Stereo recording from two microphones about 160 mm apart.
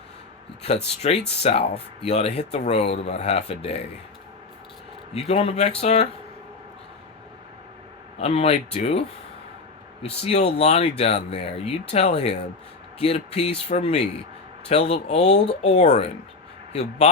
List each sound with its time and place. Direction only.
1.0 s speech: 40° left (ahead or behind)
5.1 s speech: 40° left (ahead or behind)
8.2 s speech: 40° left (ahead or behind)